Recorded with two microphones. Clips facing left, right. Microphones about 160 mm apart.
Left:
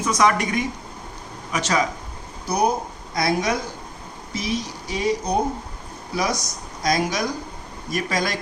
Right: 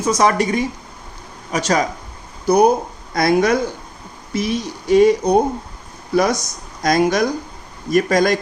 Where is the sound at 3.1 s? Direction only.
55° right (ahead or behind).